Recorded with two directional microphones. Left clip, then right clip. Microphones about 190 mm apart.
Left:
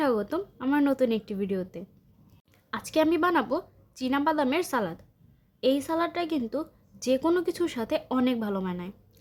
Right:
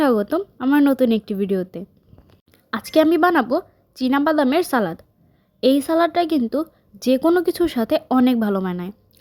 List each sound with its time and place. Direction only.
0.0 s a woman's voice: 35° right (ahead or behind)